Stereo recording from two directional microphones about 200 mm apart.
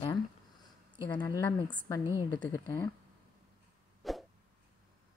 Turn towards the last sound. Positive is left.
turn(degrees=0)  # may be behind; listen again after turning